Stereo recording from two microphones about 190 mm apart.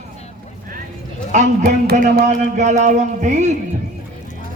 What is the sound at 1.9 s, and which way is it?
Speech, 55° right (ahead or behind).